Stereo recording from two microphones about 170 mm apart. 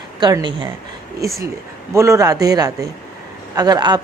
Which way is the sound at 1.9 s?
15° right (ahead or behind).